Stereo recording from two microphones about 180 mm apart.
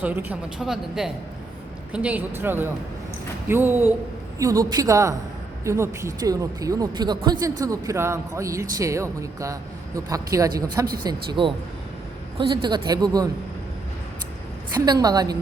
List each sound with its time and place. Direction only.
0.0 s a woman's voice: 10° right (ahead or behind)
14.7 s speech: 20° right (ahead or behind)